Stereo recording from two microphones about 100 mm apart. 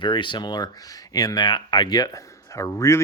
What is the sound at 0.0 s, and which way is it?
Speech, 50° left (ahead or behind).